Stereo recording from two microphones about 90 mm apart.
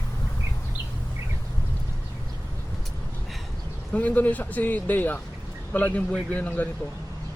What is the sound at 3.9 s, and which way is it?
A man's voice, 20° left (ahead or behind).